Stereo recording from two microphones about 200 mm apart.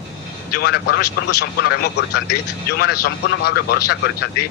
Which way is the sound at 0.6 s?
55° left (ahead or behind).